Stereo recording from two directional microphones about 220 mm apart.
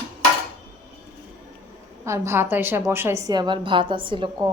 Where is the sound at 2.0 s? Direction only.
10° right (ahead or behind).